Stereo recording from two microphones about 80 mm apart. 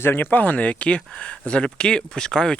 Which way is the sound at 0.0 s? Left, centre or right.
Left.